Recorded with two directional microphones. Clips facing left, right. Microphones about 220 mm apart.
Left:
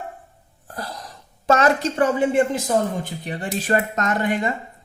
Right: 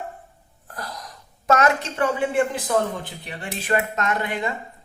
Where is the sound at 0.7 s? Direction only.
30° left (ahead or behind).